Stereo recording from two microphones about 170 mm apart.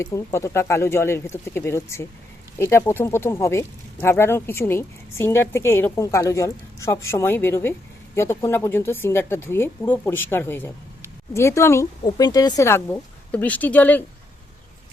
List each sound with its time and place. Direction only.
0.0 s speech: 15° left (ahead or behind)